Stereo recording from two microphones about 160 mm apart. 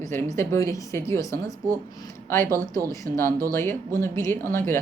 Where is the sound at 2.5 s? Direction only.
20° right (ahead or behind).